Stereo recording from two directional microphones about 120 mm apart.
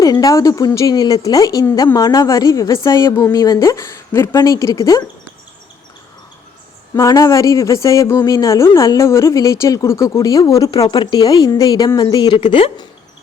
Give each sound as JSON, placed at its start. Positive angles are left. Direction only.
{"t": 0.0, "sound": "speech", "side_deg": 30}
{"t": 2.9, "sound": "speech", "side_deg": 40}
{"t": 6.9, "sound": "speech", "side_deg": 30}